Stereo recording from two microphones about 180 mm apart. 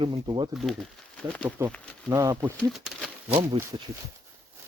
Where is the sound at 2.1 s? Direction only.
20° right (ahead or behind).